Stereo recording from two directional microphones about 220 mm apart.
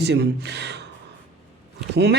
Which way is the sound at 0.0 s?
50° right (ahead or behind).